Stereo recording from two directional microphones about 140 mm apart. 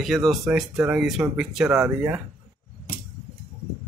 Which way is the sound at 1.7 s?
25° right (ahead or behind).